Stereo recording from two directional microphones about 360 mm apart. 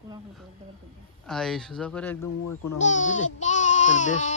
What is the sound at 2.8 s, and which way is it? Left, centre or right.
Speech, centre.